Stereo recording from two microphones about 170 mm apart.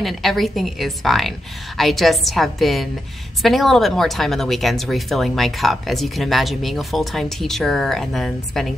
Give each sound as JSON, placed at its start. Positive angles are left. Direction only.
{"t": 0.0, "sound": "speech", "side_deg": 0}